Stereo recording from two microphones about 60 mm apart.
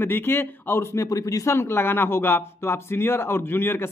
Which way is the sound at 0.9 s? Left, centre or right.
Left.